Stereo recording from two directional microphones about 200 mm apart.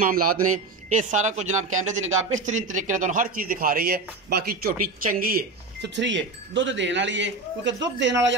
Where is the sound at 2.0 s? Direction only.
85° right.